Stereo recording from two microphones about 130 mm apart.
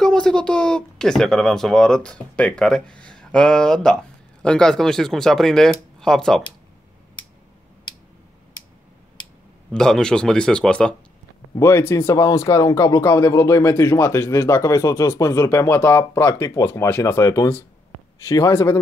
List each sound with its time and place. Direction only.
0.0 s speech: 5° left (ahead or behind)
9.7 s speech: 5° left (ahead or behind)
11.5 s speech: 20° left (ahead or behind)